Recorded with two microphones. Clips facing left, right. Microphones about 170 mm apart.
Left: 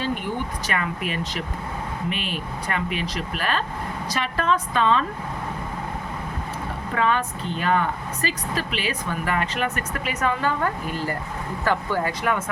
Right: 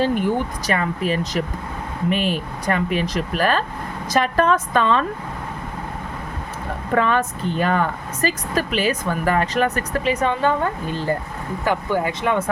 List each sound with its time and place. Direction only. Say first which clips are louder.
0.7 s a woman's voice: right 7 dB; 35° right (ahead or behind)
6.9 s a woman's voice: right 4 dB; 45° right (ahead or behind); by 12.5 s 25° right (ahead or behind)